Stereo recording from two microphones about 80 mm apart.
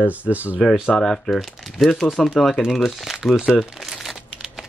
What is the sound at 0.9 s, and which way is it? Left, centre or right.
Speech, centre.